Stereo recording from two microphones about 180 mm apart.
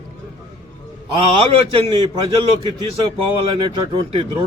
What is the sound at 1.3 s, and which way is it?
A man's voice, 35° right (ahead or behind).